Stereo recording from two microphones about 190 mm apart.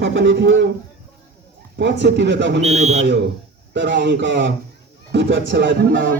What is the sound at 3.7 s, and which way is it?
A man's voice, 70° right (ahead or behind).